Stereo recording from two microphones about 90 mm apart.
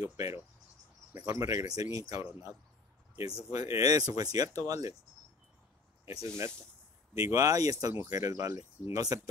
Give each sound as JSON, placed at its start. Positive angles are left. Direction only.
{"t": 0.0, "sound": "speech", "side_deg": -35}
{"t": 1.7, "sound": "speech", "side_deg": -45}
{"t": 6.2, "sound": "speech", "side_deg": -35}